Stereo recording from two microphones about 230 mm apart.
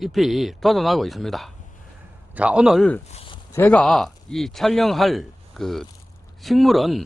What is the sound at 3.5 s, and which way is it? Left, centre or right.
A man's voice, centre.